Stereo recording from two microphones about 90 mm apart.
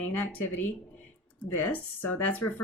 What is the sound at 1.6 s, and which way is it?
Speech, 20° left (ahead or behind).